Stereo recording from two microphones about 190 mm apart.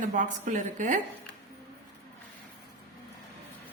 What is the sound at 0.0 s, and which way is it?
Speech, 40° right (ahead or behind).